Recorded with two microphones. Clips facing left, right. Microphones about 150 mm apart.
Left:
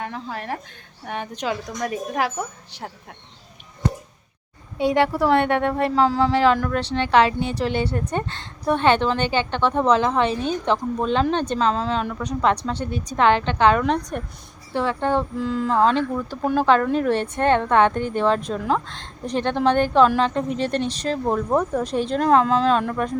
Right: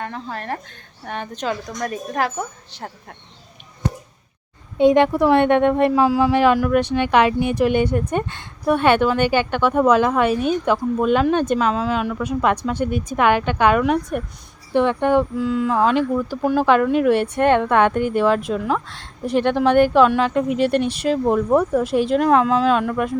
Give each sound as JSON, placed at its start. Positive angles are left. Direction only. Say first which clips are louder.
{"t": 0.0, "sound": "a woman's voice", "louder": "right 1 dB", "side_deg": 5}
{"t": 4.8, "sound": "a woman's voice", "louder": "right 5 dB", "side_deg": -20}
{"t": 15.4, "sound": "a woman's voice", "louder": "right 1 dB", "side_deg": 0}